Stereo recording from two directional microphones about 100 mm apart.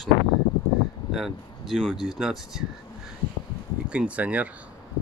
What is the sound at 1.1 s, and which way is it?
Speech, centre (ahead or behind).